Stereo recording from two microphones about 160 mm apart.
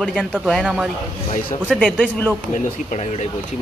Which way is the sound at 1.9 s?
10° left (ahead or behind).